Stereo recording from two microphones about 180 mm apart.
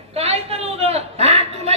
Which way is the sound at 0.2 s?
35° right (ahead or behind).